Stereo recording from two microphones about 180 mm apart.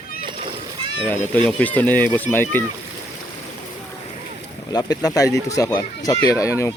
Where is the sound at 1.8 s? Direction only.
10° left (ahead or behind).